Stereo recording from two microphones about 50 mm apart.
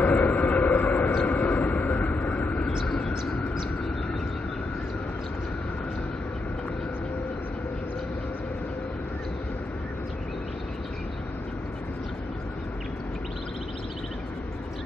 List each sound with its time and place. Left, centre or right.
0.1 s vehicle: left
1.7 s train: left
2.3 s vehicle: left